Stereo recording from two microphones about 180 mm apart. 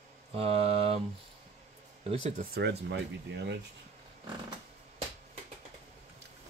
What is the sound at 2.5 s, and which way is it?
Speech, 70° right (ahead or behind).